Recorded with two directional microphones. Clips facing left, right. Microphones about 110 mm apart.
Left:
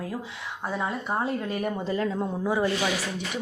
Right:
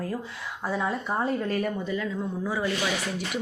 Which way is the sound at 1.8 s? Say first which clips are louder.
Left 3 dB; 40° left (ahead or behind).